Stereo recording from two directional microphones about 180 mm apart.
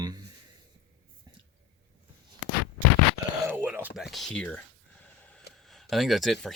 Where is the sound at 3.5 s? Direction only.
10° right (ahead or behind); by 4.6 s 5° left (ahead or behind).